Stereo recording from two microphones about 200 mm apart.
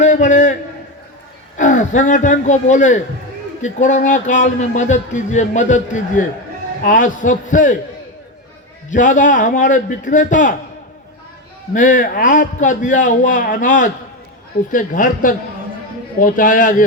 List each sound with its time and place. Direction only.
0.0 s a man's voice: 40° left (ahead or behind)
1.5 s a man's voice: 40° left (ahead or behind)
8.9 s a man's voice: 40° left (ahead or behind)
11.7 s a man's voice: 40° left (ahead or behind)